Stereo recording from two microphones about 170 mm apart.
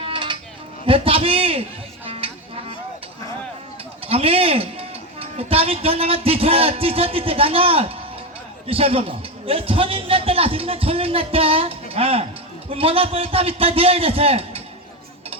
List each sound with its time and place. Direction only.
0.0 s a sound: 30° right (ahead or behind)
2.0 s music: 35° right (ahead or behind)
4.0 s a man's voice: 35° right (ahead or behind)